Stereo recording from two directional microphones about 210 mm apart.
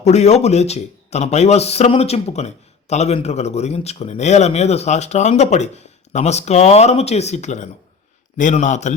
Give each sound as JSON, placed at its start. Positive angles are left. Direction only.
{"t": 0.0, "sound": "speech", "side_deg": 30}